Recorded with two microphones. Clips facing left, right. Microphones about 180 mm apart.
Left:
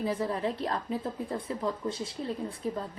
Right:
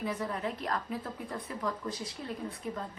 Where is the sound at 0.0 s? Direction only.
30° left (ahead or behind).